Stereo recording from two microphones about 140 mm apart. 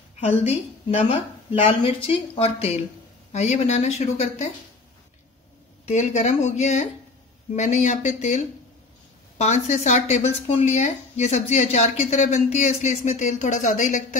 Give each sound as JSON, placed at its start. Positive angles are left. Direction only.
{"t": 0.2, "sound": "a woman's voice", "side_deg": 50}
{"t": 5.9, "sound": "speech", "side_deg": 55}
{"t": 9.4, "sound": "speech", "side_deg": 55}